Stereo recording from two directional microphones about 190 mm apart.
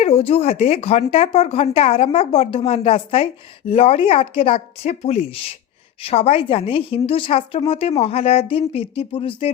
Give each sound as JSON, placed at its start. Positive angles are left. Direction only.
{"t": 0.0, "sound": "a woman's voice", "side_deg": 30}